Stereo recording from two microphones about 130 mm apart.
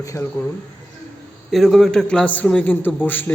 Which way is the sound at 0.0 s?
25° left (ahead or behind).